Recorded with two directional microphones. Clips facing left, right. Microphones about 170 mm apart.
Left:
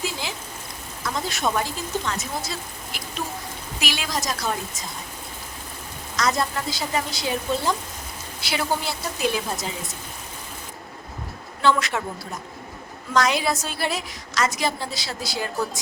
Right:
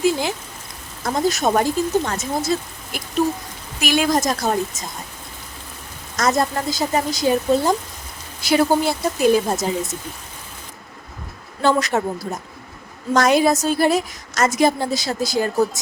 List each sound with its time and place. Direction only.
0.0 s a woman's voice: 50° right (ahead or behind)
6.1 s a woman's voice: 45° right (ahead or behind)
11.6 s a woman's voice: 40° right (ahead or behind)